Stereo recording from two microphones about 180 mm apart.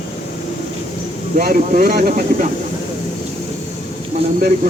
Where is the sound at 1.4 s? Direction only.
55° right (ahead or behind).